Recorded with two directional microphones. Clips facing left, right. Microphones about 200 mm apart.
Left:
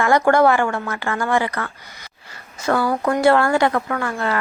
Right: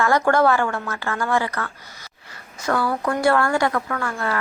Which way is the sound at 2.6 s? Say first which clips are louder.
Left 3 dB; 25° left (ahead or behind).